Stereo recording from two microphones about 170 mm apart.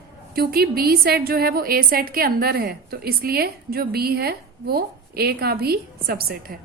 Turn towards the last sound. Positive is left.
turn(degrees=-60)  # may be behind; listen again after turning